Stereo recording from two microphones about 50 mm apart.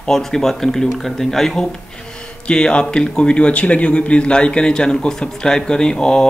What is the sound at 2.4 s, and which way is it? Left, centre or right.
Speech, left.